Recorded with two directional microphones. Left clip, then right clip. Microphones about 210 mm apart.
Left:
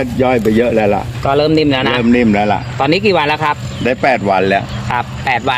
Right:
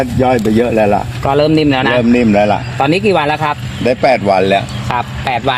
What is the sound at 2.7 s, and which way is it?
Speech, 40° right (ahead or behind).